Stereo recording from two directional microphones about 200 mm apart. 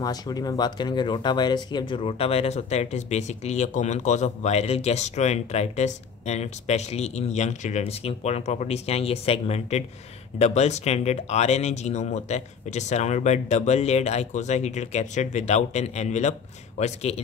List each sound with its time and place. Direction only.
0.0 s speech: 20° left (ahead or behind)